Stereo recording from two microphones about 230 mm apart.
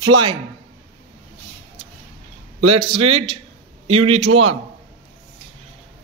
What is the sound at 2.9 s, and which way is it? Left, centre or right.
A man's voice, right.